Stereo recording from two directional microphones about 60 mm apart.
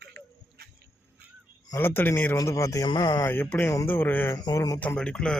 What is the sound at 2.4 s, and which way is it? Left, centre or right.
Speech, left.